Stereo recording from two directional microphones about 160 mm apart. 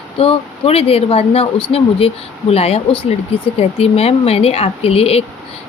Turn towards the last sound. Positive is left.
turn(degrees=40)  # may be behind; listen again after turning